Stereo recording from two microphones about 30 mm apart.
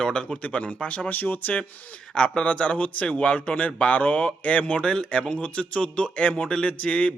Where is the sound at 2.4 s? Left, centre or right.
Left.